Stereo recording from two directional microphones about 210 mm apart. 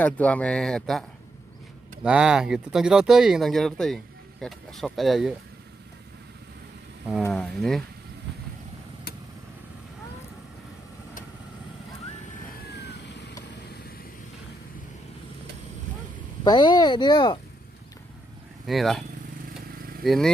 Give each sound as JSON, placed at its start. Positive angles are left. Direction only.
{"t": 0.0, "sound": "speech", "side_deg": 5}
{"t": 2.0, "sound": "speech", "side_deg": -5}
{"t": 7.2, "sound": "speech", "side_deg": 5}
{"t": 12.7, "sound": "vehicle", "side_deg": 55}
{"t": 16.4, "sound": "speech", "side_deg": 20}
{"t": 18.7, "sound": "speech", "side_deg": 0}